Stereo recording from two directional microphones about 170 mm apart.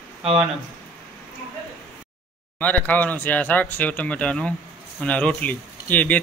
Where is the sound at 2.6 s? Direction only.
10° left (ahead or behind).